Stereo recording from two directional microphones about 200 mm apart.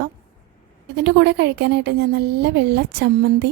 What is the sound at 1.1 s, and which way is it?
Speech, 60° right (ahead or behind).